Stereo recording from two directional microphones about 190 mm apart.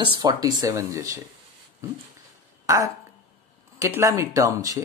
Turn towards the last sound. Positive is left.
turn(degrees=-20)  # may be behind; listen again after turning